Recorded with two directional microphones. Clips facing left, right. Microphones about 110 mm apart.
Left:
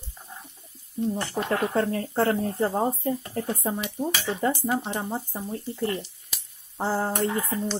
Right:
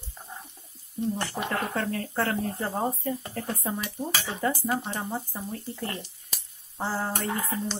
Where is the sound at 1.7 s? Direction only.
25° left (ahead or behind).